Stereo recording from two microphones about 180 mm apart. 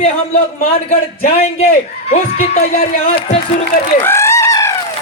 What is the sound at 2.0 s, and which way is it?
A woman's voice, 35° left (ahead or behind).